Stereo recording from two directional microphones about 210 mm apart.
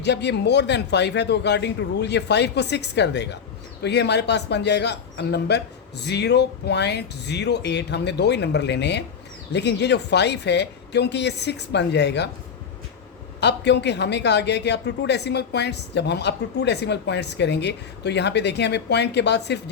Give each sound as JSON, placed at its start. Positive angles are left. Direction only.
{"t": 0.0, "sound": "speech", "side_deg": 55}
{"t": 13.4, "sound": "speech", "side_deg": 55}